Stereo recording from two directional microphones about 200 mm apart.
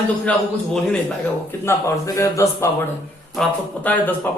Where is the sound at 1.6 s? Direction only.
15° left (ahead or behind).